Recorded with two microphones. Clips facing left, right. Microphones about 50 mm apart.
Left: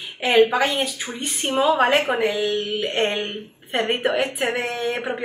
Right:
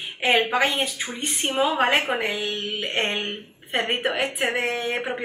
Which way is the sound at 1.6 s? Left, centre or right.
Centre.